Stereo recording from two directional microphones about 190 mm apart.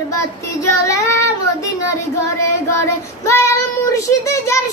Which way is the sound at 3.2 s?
15° left (ahead or behind).